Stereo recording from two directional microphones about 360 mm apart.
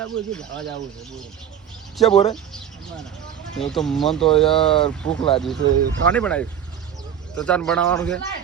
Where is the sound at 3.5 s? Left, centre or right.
Centre.